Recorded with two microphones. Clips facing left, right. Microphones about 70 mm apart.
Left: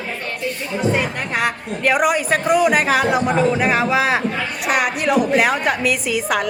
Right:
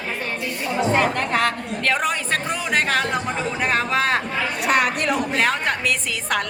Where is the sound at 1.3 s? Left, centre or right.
Centre.